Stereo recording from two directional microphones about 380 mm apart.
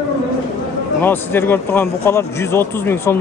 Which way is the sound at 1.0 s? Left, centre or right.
Centre.